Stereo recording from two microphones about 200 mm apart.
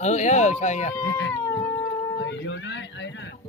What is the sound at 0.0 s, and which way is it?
Speech, 35° left (ahead or behind).